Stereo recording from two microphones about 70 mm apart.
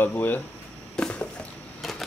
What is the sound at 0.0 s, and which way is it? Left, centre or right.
Speech, left.